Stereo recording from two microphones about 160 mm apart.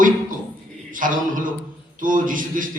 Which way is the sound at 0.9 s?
55° right (ahead or behind).